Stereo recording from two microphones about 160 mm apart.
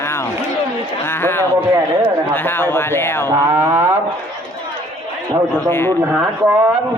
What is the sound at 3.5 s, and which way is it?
Speech, 15° right (ahead or behind).